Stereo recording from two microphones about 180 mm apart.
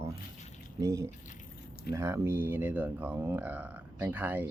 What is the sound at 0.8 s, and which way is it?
Speech, 15° right (ahead or behind).